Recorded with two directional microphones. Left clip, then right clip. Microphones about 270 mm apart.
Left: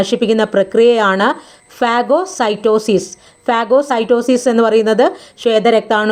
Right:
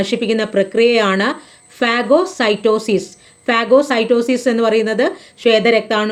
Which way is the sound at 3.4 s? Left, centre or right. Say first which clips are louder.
Even; centre.